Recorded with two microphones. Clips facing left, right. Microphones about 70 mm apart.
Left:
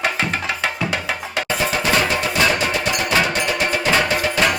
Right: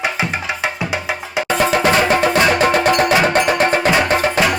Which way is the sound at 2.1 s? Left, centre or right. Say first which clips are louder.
Right 5 dB; right.